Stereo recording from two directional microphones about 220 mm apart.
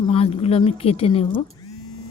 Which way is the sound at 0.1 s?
25° left (ahead or behind).